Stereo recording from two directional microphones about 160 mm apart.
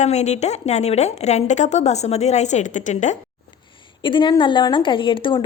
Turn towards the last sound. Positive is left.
turn(degrees=30)  # may be behind; listen again after turning